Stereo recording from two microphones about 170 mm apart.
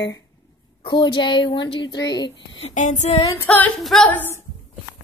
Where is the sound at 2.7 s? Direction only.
45° left (ahead or behind).